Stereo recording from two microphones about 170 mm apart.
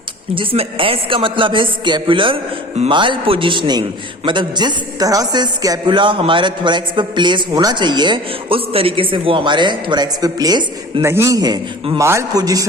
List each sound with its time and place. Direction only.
0.3 s a man's voice: 30° right (ahead or behind)
11.0 s a man's voice: 15° right (ahead or behind)